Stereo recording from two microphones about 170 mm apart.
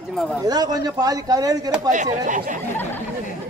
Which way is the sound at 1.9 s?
45° right (ahead or behind).